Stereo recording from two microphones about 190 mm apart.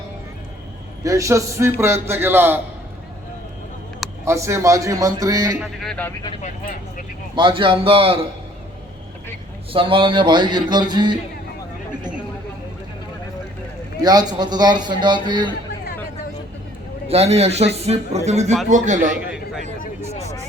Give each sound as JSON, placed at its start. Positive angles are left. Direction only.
{"t": 1.0, "sound": "a man's voice", "side_deg": -15}
{"t": 4.3, "sound": "a man's voice", "side_deg": -15}
{"t": 5.5, "sound": "speech", "side_deg": 0}
{"t": 6.4, "sound": "speech", "side_deg": 45}
{"t": 7.3, "sound": "a man's voice", "side_deg": -25}
{"t": 9.7, "sound": "a man's voice", "side_deg": -25}
{"t": 14.0, "sound": "a man's voice", "side_deg": -20}
{"t": 17.1, "sound": "speech", "side_deg": -35}
{"t": 19.2, "sound": "a sound", "side_deg": -5}
{"t": 19.8, "sound": "vehicle", "side_deg": 35}